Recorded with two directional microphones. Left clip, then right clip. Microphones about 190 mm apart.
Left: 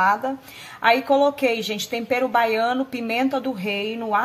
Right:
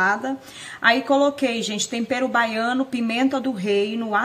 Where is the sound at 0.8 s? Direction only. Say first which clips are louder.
Even; 25° left (ahead or behind).